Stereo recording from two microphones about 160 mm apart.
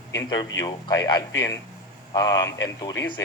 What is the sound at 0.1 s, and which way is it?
Speech, 20° left (ahead or behind).